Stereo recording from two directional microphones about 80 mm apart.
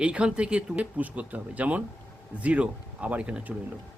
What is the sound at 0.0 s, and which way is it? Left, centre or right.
Speech, centre.